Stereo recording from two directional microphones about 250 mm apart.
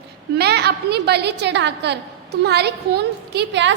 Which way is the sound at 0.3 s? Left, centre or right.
Right.